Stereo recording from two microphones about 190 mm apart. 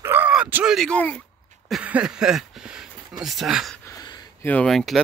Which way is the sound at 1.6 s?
5° right (ahead or behind).